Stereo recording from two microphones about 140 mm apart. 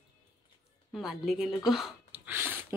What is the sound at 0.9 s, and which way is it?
A woman's voice, centre (ahead or behind).